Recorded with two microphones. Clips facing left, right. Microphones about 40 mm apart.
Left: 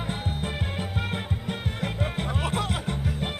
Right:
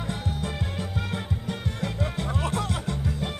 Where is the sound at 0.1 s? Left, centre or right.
Left.